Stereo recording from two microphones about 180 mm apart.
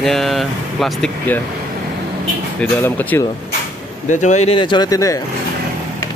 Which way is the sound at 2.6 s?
10° left (ahead or behind).